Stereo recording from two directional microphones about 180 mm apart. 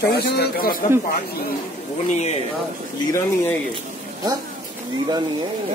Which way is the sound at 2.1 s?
40° left (ahead or behind).